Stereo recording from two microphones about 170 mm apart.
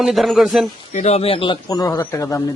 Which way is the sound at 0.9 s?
40° left (ahead or behind).